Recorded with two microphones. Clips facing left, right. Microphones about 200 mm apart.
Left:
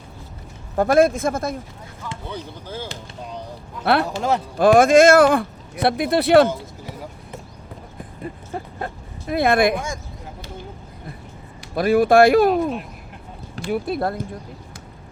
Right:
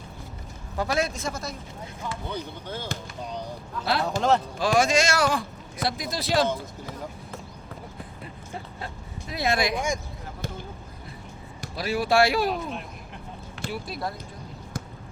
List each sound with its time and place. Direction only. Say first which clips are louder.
0.8 s speech: left 11 dB; 50° left (ahead or behind)
2.3 s speech: left 2 dB; 5° left (ahead or behind)
4.5 s speech: left 10 dB; 55° left (ahead or behind)
8.5 s speech: left 6 dB; 55° left (ahead or behind)
11.7 s speech: left 9 dB; 55° left (ahead or behind)